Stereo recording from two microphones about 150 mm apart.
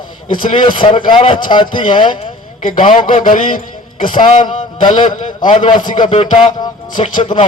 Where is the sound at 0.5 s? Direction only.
30° left (ahead or behind).